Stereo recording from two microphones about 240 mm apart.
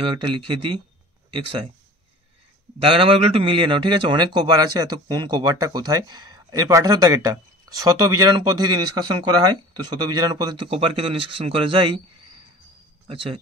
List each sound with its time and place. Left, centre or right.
0.0 s speech: centre
2.8 s a man's voice: right
13.0 s speech: right